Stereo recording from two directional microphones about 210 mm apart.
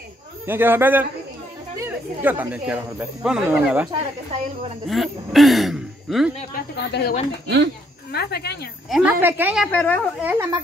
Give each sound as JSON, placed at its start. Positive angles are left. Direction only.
{"t": 0.5, "sound": "a man's voice", "side_deg": -10}
{"t": 6.5, "sound": "a woman's voice", "side_deg": 50}
{"t": 7.4, "sound": "speech", "side_deg": -55}
{"t": 8.1, "sound": "a woman's voice", "side_deg": 50}
{"t": 8.8, "sound": "a woman's voice", "side_deg": 0}
{"t": 9.7, "sound": "speech", "side_deg": 10}
{"t": 10.2, "sound": "a man's voice", "side_deg": -10}